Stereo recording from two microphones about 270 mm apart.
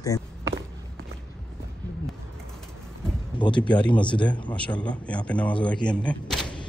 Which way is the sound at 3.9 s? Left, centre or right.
Centre.